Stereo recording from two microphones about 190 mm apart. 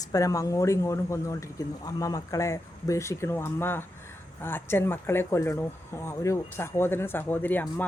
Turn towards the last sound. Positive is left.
turn(degrees=10)  # may be behind; listen again after turning